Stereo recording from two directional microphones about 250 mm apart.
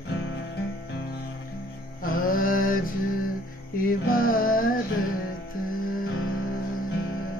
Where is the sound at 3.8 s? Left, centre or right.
Left.